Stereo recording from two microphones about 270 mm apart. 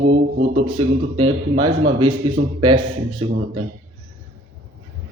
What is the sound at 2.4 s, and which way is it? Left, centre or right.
Speech, right.